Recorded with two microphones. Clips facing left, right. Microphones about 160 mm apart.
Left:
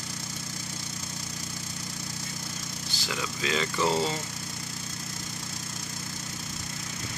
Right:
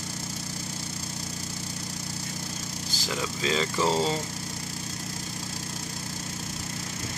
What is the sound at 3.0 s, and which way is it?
Speech, 35° right (ahead or behind).